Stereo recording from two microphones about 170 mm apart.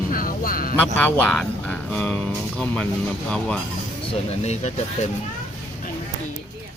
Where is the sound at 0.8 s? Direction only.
10° left (ahead or behind).